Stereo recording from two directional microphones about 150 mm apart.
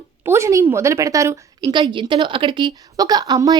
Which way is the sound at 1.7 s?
30° right (ahead or behind).